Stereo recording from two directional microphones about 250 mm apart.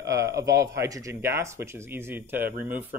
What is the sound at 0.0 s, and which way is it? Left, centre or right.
Speech, centre.